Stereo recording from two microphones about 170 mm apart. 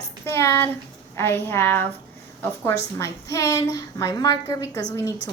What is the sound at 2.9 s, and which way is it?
A woman's voice, 15° left (ahead or behind).